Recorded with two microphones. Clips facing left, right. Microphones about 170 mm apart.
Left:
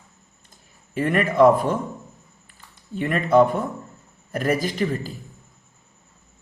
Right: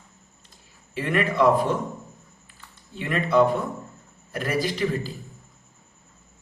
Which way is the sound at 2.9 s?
50° left (ahead or behind).